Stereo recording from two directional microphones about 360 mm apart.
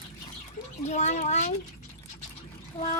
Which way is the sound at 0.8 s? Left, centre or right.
Centre.